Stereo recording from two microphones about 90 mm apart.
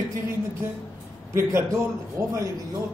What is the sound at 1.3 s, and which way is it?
A man's voice, 30° right (ahead or behind).